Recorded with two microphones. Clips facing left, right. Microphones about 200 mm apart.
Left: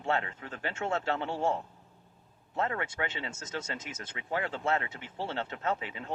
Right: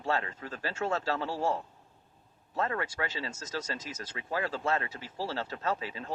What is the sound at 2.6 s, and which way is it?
Speech, 25° left (ahead or behind).